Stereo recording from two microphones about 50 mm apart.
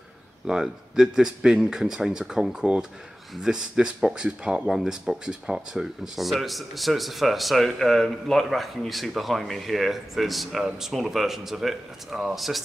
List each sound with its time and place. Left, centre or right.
0.5 s speech: centre
2.6 s speech: right
6.1 s speech: centre